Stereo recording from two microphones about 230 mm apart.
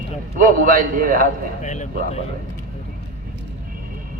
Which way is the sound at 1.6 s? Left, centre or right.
Left.